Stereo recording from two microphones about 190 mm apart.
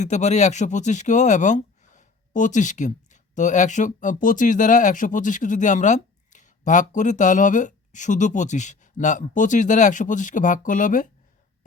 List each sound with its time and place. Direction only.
0.0 s speech: 35° left (ahead or behind)